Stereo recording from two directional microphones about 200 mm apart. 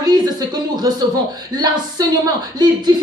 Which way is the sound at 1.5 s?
20° right (ahead or behind).